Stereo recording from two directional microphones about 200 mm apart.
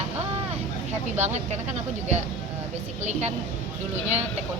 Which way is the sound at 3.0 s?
35° right (ahead or behind).